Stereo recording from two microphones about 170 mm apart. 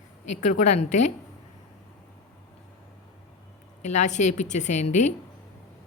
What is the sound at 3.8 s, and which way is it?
Speech, 45° left (ahead or behind).